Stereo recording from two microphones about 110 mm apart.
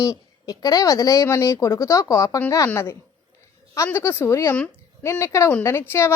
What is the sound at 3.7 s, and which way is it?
Speech, 25° left (ahead or behind).